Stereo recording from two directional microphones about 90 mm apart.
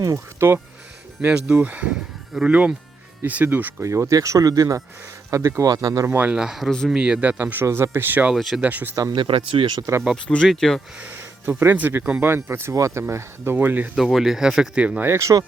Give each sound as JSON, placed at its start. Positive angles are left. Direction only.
{"t": 0.0, "sound": "speech", "side_deg": -40}
{"t": 1.2, "sound": "speech", "side_deg": -20}
{"t": 3.8, "sound": "speech", "side_deg": -35}
{"t": 6.1, "sound": "speech", "side_deg": -20}
{"t": 6.3, "sound": "speech", "side_deg": -5}
{"t": 6.9, "sound": "speech", "side_deg": -10}
{"t": 8.4, "sound": "speech", "side_deg": 0}
{"t": 8.6, "sound": "speech", "side_deg": -20}
{"t": 9.1, "sound": "speech", "side_deg": -75}
{"t": 10.2, "sound": "speech", "side_deg": 5}
{"t": 11.0, "sound": "speech", "side_deg": -20}
{"t": 13.9, "sound": "speech", "side_deg": 0}
{"t": 15.0, "sound": "speech", "side_deg": -35}